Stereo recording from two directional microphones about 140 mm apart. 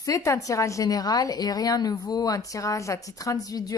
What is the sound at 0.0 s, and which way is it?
Speech, 25° left (ahead or behind).